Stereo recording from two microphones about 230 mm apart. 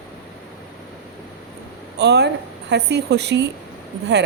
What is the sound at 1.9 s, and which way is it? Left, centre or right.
A woman's voice, right.